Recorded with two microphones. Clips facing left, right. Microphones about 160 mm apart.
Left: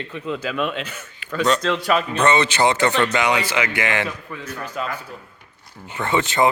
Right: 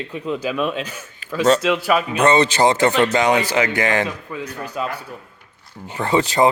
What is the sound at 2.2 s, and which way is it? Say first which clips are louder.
Speech: right 3 dB; 35° right (ahead or behind).